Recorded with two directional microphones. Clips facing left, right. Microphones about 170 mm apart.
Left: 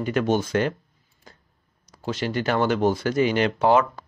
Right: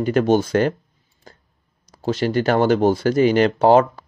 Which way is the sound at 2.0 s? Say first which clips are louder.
Right 6 dB; 35° right (ahead or behind).